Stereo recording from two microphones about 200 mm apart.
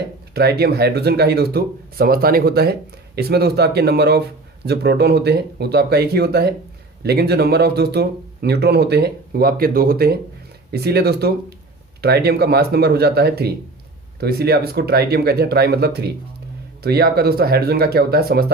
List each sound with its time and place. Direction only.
0.3 s speech: 55° right (ahead or behind)